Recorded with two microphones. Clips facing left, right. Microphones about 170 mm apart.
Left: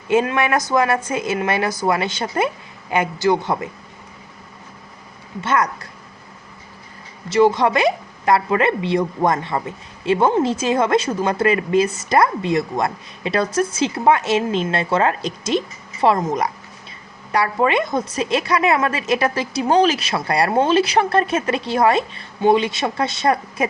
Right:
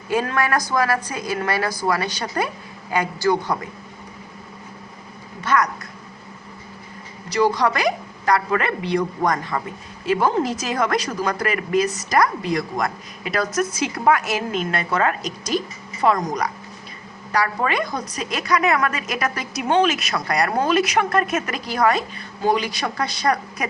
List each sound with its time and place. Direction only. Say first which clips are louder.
0.1 s a woman's voice: left 4 dB; 20° left (ahead or behind)
5.4 s a woman's voice: left 1 dB; 25° left (ahead or behind)
7.3 s a woman's voice: left 4 dB; 25° left (ahead or behind)